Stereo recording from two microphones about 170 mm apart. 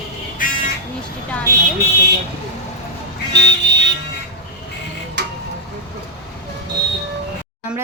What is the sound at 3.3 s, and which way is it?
Vehicle, 90° right.